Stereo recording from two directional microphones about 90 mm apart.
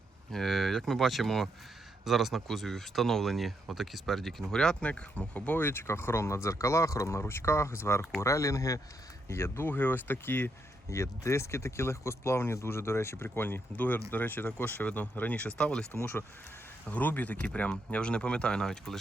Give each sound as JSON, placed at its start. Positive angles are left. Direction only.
{"t": 0.3, "sound": "speech", "side_deg": 5}
{"t": 10.8, "sound": "speech", "side_deg": 35}
{"t": 16.0, "sound": "speech", "side_deg": 25}